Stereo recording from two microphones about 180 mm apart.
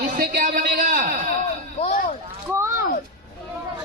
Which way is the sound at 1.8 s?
35° left (ahead or behind).